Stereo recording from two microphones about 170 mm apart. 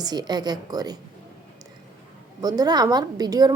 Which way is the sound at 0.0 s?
25° right (ahead or behind).